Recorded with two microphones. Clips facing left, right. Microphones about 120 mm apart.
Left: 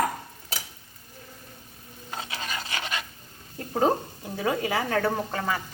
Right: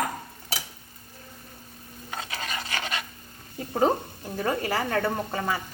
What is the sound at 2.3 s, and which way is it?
Filing, 20° left (ahead or behind).